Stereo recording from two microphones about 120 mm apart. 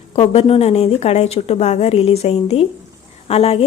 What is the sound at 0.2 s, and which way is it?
A woman's voice, 55° left (ahead or behind).